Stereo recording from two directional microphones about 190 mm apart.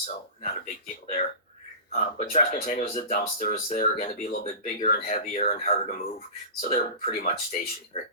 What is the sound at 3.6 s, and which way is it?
Speech, 40° left (ahead or behind).